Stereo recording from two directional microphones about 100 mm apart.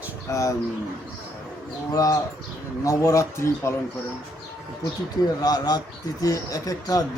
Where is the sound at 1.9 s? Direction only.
40° left (ahead or behind).